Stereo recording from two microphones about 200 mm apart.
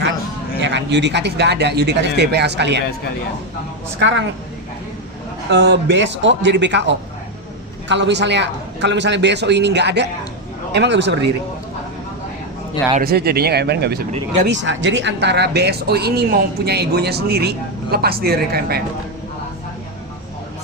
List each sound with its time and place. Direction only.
0.6 s speech: 60° right (ahead or behind)
4.0 s speech: 65° right (ahead or behind)
5.5 s speech: 60° right (ahead or behind)
13.0 s speech: 50° right (ahead or behind)